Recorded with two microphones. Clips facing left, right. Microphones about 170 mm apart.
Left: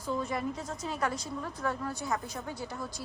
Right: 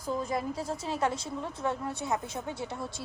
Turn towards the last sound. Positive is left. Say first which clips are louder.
# right 2 dB
turn(degrees=-25)  # may be behind; listen again after turning